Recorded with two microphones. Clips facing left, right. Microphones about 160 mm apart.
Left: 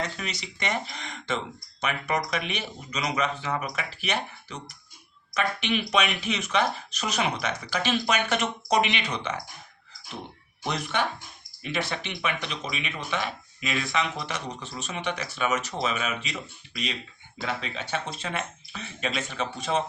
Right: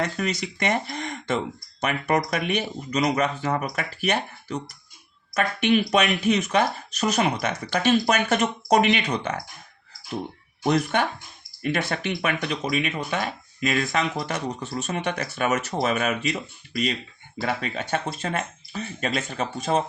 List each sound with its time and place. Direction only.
0.0 s speech: 50° right (ahead or behind)
10.6 s speech: 45° right (ahead or behind)